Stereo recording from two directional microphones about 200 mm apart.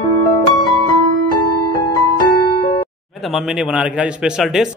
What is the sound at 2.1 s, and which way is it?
Music, 25° left (ahead or behind).